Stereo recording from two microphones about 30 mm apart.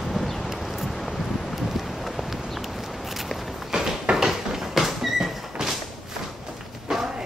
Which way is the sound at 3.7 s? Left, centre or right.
Centre.